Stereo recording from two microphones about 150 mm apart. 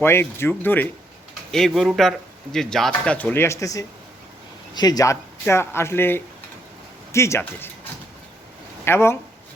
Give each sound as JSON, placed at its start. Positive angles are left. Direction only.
{"t": 0.0, "sound": "speech", "side_deg": 15}
{"t": 1.5, "sound": "speech", "side_deg": 5}
{"t": 8.8, "sound": "speech", "side_deg": 15}